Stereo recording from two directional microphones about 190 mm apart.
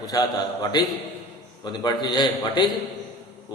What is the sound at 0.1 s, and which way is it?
A man's voice, 20° left (ahead or behind).